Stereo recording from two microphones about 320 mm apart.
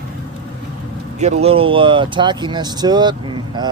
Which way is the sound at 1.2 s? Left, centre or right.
Centre.